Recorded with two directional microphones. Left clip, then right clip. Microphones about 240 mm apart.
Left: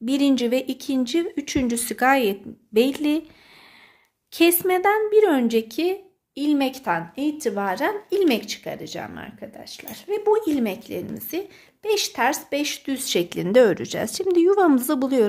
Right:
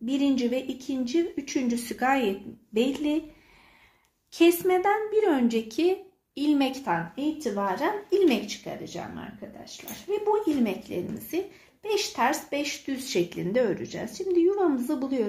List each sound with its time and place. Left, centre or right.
0.0 s speech: left
4.3 s speech: left